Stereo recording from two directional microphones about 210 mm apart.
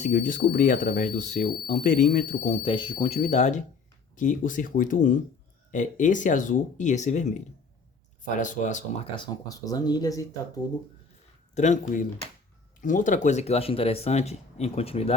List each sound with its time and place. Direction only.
0.0 s speech: 35° left (ahead or behind)
3.2 s speech: 35° left (ahead or behind)
8.4 s speech: 35° left (ahead or behind)
9.1 s speech: 20° left (ahead or behind)
11.5 s speech: 35° left (ahead or behind)